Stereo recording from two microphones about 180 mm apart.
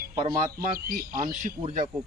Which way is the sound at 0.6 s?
55° right (ahead or behind).